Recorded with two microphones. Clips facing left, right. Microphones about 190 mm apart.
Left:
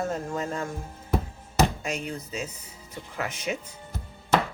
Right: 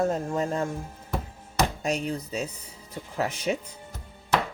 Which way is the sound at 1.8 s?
35° right (ahead or behind).